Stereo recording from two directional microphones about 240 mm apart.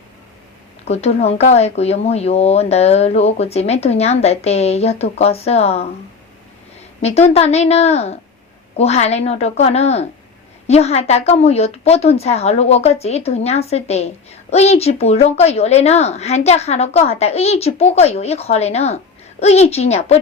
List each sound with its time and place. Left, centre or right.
0.9 s a woman's voice: left
7.0 s a woman's voice: left